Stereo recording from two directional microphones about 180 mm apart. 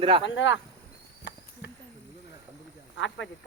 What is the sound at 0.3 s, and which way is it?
Speech, 90° left.